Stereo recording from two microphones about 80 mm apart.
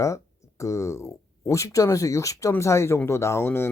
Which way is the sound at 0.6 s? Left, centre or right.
Left.